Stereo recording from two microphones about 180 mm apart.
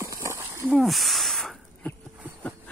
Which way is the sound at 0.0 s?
15° right (ahead or behind).